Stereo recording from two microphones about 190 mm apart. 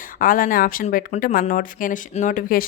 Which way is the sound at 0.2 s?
45° left (ahead or behind).